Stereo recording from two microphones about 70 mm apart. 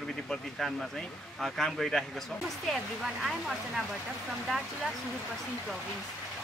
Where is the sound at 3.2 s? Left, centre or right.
Centre.